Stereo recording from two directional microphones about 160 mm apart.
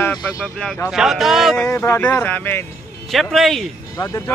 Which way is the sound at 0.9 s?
Centre (ahead or behind).